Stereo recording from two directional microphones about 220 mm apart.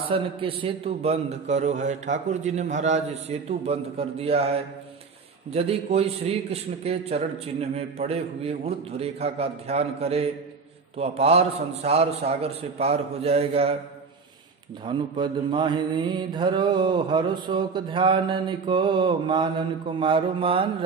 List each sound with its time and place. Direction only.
0.1 s mantra: 25° right (ahead or behind)
5.5 s mantra: 30° right (ahead or behind)
14.9 s mantra: 20° right (ahead or behind)